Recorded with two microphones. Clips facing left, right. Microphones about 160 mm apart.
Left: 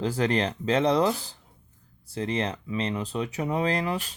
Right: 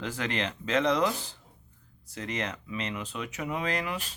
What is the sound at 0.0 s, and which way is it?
Speech, 35° left (ahead or behind).